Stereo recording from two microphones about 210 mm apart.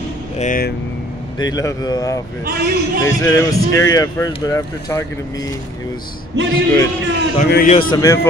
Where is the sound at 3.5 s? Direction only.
15° left (ahead or behind).